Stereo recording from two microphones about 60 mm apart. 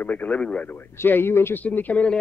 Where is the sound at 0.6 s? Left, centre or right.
Left.